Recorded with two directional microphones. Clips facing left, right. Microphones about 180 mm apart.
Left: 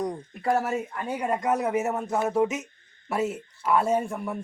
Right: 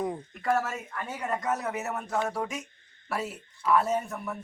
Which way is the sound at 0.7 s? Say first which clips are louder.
Left 7 dB; 30° left (ahead or behind).